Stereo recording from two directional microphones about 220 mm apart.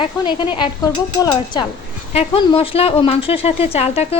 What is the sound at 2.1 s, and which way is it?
Speech, 25° left (ahead or behind).